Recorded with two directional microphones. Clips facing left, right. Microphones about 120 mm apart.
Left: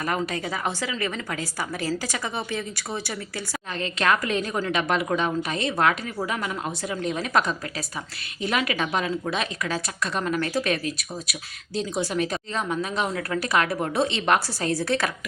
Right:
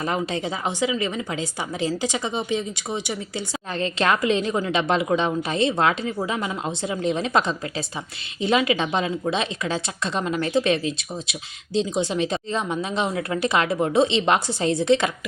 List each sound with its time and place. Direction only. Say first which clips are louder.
0.0 s speech: right 2 dB; 25° right (ahead or behind)
3.8 s speech: right 2 dB; 30° right (ahead or behind)